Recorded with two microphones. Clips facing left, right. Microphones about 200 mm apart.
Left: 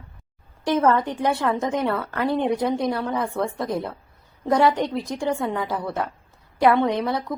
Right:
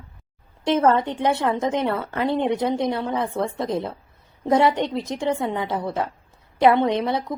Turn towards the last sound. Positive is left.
turn(degrees=-20)  # may be behind; listen again after turning